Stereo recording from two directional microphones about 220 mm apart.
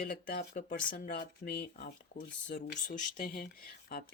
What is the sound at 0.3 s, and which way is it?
Speech, 40° left (ahead or behind).